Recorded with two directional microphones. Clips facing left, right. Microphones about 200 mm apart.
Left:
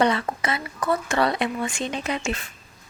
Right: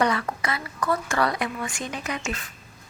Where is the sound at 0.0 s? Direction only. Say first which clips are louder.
Left 2 dB; 25° left (ahead or behind).